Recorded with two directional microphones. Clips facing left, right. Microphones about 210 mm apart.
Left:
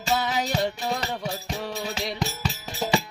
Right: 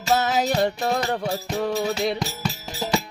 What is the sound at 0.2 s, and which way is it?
Music, 60° right (ahead or behind).